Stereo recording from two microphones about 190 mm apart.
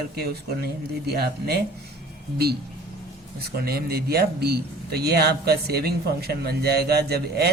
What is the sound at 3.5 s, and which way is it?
Speech, 55° right (ahead or behind).